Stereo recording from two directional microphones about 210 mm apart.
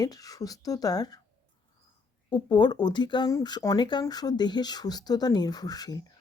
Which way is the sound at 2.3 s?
20° left (ahead or behind).